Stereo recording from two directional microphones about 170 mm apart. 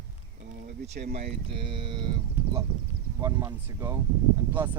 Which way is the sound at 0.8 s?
40° right (ahead or behind).